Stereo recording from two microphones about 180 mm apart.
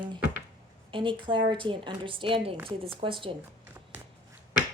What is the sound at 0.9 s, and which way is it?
A woman's voice, 30° right (ahead or behind).